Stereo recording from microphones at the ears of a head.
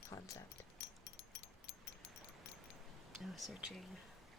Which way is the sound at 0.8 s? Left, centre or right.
Left.